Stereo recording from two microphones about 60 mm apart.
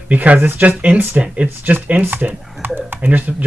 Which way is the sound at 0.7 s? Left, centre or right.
Right.